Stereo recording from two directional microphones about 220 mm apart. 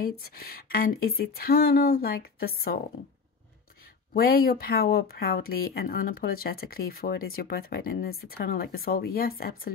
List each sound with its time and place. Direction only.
0.2 s speech: 45° left (ahead or behind)
4.1 s speech: 45° left (ahead or behind)